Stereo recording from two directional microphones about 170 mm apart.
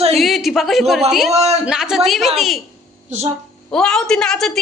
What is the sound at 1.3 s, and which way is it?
Speech, 40° right (ahead or behind).